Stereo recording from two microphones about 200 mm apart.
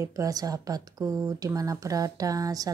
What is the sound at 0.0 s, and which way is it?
Speech, 15° right (ahead or behind).